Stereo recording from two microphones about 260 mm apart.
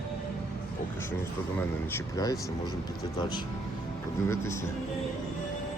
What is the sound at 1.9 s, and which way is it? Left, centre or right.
Speech, centre.